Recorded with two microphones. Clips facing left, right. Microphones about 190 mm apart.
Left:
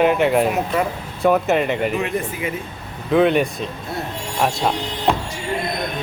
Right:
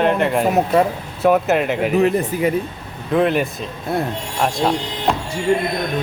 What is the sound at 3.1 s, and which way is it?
Speech, centre (ahead or behind).